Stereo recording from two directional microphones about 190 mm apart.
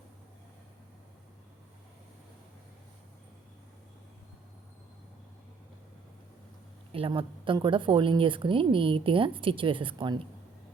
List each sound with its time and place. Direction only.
6.9 s a woman's voice: 30° right (ahead or behind)